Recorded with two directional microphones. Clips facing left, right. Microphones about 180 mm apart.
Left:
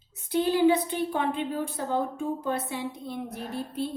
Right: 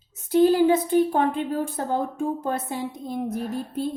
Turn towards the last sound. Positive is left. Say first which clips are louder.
# right 4 dB
turn(degrees=-45)  # may be behind; listen again after turning